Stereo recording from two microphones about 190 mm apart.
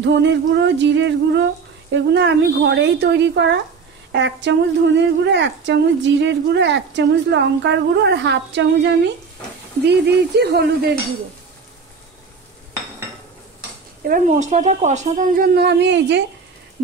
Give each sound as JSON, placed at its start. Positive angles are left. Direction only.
{"t": 0.0, "sound": "a woman's voice", "side_deg": -70}
{"t": 14.0, "sound": "a woman's voice", "side_deg": -45}